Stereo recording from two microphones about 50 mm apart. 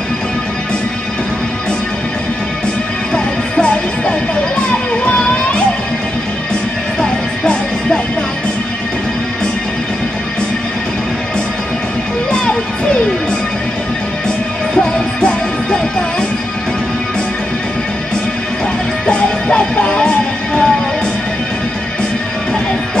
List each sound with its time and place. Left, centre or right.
3.5 s music: left
7.0 s music: centre
12.3 s music: centre
14.8 s music: centre
19.0 s music: left